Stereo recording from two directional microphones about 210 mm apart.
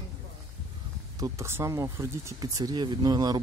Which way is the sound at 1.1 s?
15° right (ahead or behind).